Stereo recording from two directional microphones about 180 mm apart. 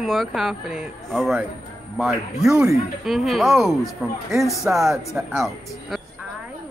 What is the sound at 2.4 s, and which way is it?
Speech, 15° right (ahead or behind).